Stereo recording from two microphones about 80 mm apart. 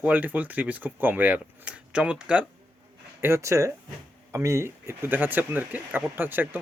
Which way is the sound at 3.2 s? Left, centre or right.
Right.